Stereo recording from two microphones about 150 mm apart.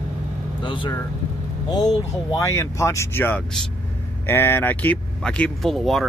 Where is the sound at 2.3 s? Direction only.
20° left (ahead or behind); by 6.1 s centre (ahead or behind).